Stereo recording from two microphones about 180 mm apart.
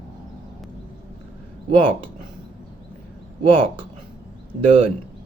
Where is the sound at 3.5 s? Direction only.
30° right (ahead or behind).